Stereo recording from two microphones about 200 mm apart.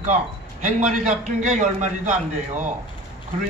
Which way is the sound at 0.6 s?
40° right (ahead or behind).